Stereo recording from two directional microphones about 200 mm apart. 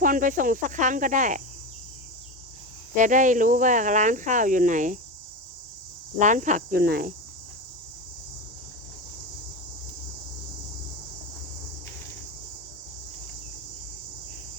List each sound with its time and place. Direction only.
0.0 s speech: 40° right (ahead or behind)
2.9 s speech: 40° right (ahead or behind)
6.1 s speech: 40° right (ahead or behind)